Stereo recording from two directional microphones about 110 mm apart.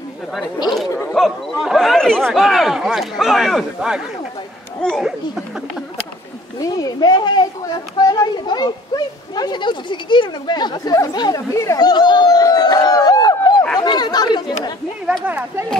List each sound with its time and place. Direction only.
1.1 s speech: centre (ahead or behind)
6.6 s speech: 35° left (ahead or behind)
11.5 s a sound: 30° left (ahead or behind)
13.7 s speech: 40° left (ahead or behind)
15.2 s speech: 15° right (ahead or behind)